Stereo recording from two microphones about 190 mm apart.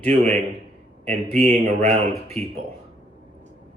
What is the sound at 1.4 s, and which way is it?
Speech, 40° right (ahead or behind).